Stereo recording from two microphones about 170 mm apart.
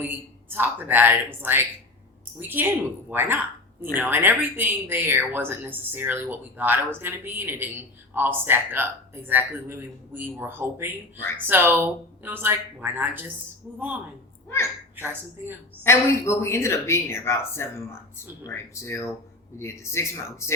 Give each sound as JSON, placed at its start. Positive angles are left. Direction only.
{"t": 0.0, "sound": "speech", "side_deg": -10}
{"t": 15.8, "sound": "speech", "side_deg": 15}